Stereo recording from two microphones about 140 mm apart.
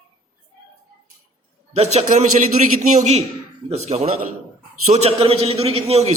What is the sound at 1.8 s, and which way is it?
Speech, 50° right (ahead or behind).